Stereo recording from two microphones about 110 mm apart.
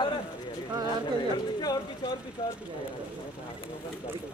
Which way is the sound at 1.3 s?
35° left (ahead or behind).